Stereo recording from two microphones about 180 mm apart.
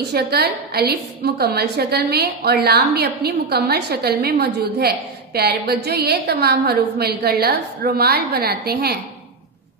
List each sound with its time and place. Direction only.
0.1 s a woman's voice: 65° right (ahead or behind)